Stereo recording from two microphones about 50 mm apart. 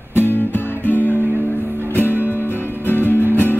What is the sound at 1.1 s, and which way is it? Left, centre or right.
Music, right.